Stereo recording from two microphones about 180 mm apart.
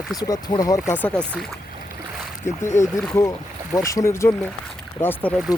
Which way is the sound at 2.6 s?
15° left (ahead or behind).